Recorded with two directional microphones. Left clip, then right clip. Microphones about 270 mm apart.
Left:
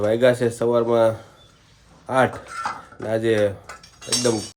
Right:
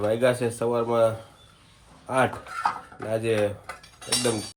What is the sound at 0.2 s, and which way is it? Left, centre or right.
Speech, left.